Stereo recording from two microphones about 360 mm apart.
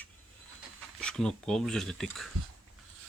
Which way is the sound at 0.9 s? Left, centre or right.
Centre.